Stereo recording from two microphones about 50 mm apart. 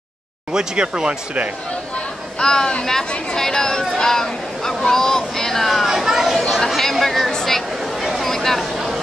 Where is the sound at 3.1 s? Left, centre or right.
Left.